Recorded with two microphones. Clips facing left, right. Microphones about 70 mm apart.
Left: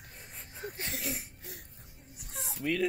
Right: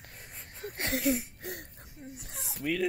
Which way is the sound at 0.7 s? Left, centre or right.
Right.